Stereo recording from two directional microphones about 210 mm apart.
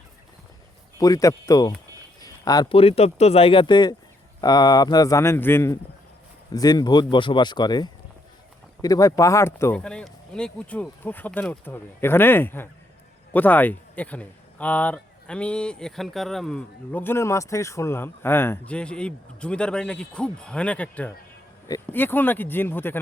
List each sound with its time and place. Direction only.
0.9 s speech: 15° left (ahead or behind)